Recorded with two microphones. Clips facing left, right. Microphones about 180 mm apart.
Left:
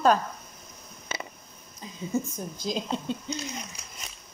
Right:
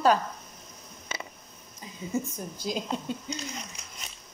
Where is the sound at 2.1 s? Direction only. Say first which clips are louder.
Left 2 dB; 5° right (ahead or behind).